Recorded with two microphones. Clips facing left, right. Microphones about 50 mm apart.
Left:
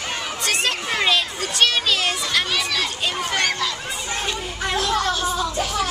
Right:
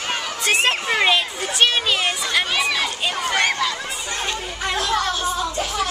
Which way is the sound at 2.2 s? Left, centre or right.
Centre.